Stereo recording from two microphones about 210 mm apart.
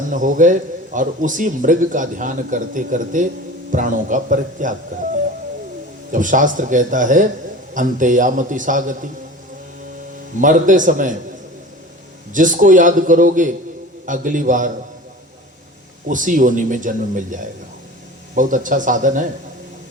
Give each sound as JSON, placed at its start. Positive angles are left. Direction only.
{"t": 0.1, "sound": "a man's voice", "side_deg": -40}
{"t": 6.1, "sound": "a man's voice", "side_deg": -40}
{"t": 10.3, "sound": "a man's voice", "side_deg": -40}
{"t": 12.3, "sound": "a man's voice", "side_deg": -40}
{"t": 16.0, "sound": "a man's voice", "side_deg": -40}